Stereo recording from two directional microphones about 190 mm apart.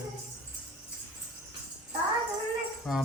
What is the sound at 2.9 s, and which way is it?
Speech, centre (ahead or behind).